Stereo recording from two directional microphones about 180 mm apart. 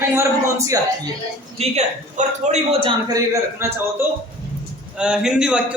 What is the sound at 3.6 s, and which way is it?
A man's voice, 15° right (ahead or behind).